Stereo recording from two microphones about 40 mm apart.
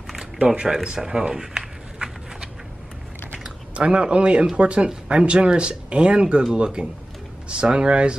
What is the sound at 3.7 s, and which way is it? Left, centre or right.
Speech, right.